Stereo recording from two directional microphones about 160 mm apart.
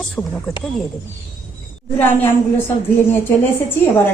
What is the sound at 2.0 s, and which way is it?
A woman's voice, 15° left (ahead or behind).